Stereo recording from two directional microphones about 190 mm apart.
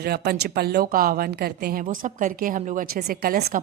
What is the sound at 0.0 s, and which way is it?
A woman's voice, 55° right (ahead or behind).